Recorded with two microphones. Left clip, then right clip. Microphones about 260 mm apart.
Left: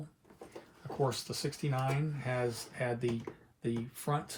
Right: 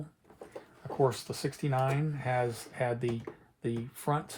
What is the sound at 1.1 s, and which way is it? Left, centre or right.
Speech, right.